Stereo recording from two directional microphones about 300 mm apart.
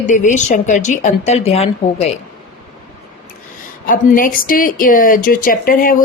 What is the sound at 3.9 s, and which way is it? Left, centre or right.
A woman's voice, left.